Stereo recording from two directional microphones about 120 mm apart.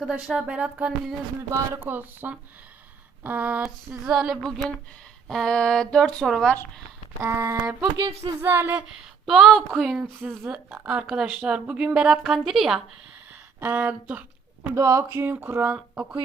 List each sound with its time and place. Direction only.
0.0 s a woman's voice: 10° right (ahead or behind)
1.5 s a woman's voice: 25° right (ahead or behind); by 6.6 s 5° left (ahead or behind)
7.2 s a sound: 20° right (ahead or behind)
7.6 s a woman's voice: 10° right (ahead or behind)
8.2 s a sound: 20° right (ahead or behind)
8.9 s a sound: 5° right (ahead or behind)
9.7 s speech: centre (ahead or behind)
10.2 s a woman's voice: 15° right (ahead or behind)
13.6 s speech: 15° right (ahead or behind)
14.8 s a woman's voice: 25° right (ahead or behind); by 16.1 s 10° right (ahead or behind)